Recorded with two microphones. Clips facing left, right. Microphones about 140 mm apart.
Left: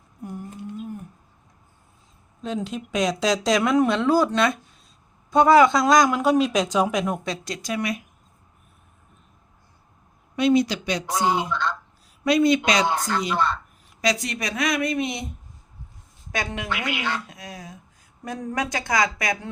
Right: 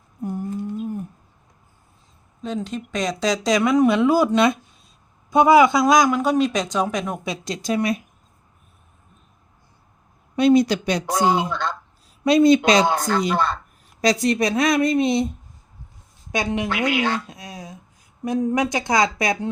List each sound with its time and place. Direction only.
0.2 s a sound: 30° right (ahead or behind)
2.4 s speech: 5° left (ahead or behind)
7.3 s speech: 20° right (ahead or behind)
10.3 s speech: 40° right (ahead or behind)
16.3 s speech: 20° right (ahead or behind)
16.6 s speech: 40° right (ahead or behind)
17.2 s speech: 20° right (ahead or behind)